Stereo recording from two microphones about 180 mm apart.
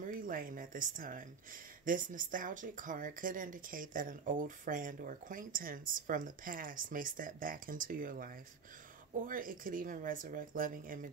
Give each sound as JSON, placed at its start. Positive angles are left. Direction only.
{"t": 0.0, "sound": "speech", "side_deg": -50}